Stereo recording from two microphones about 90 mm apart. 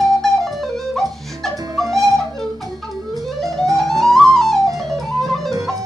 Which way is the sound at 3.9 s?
40° right (ahead or behind).